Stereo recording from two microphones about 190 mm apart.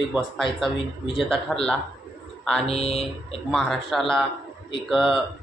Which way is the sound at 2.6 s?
30° left (ahead or behind).